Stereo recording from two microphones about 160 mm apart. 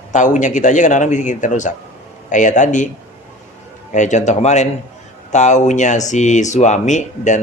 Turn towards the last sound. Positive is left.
turn(degrees=50)  # may be behind; listen again after turning